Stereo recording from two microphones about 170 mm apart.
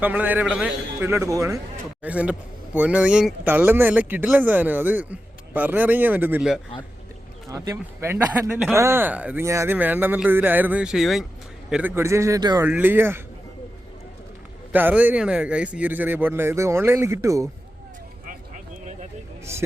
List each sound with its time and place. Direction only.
0.0 s a man's voice: 10° right (ahead or behind)
2.0 s a man's voice: 10° right (ahead or behind)
12.6 s a man's voice: 10° right (ahead or behind)
14.7 s a man's voice: 10° right (ahead or behind)